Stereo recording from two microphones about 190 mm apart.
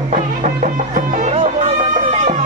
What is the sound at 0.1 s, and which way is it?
Music, 40° right (ahead or behind).